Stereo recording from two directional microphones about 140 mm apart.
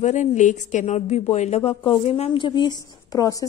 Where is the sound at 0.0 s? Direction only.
55° left (ahead or behind).